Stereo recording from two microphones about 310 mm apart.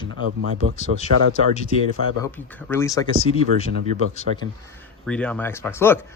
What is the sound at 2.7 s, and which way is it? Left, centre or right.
Speech, centre.